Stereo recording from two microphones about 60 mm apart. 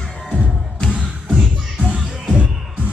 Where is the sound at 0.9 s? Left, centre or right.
Centre.